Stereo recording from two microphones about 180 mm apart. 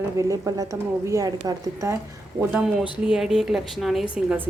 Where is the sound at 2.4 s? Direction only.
10° right (ahead or behind).